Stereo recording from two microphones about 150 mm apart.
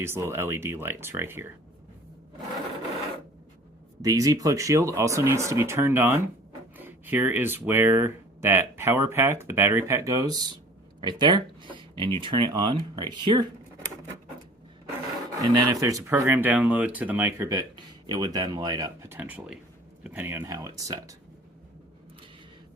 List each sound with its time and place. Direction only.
0.0 s speech: 15° right (ahead or behind)
4.0 s speech: 25° right (ahead or behind)
11.6 s a sound: 35° right (ahead or behind)
12.2 s speech: 30° right (ahead or behind)
15.4 s speech: 25° right (ahead or behind)